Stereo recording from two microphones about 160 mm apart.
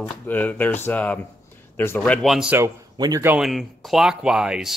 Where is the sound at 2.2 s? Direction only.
Centre (ahead or behind).